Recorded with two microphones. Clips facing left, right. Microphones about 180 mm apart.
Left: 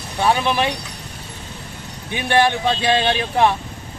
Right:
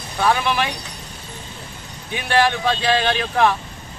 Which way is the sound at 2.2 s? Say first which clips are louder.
Left 1 dB; 20° left (ahead or behind).